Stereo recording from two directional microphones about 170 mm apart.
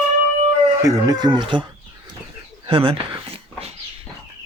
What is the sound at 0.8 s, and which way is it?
Speech, 20° right (ahead or behind).